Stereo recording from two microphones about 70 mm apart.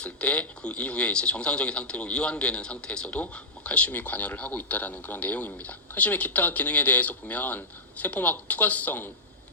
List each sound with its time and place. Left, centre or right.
0.0 s speech: centre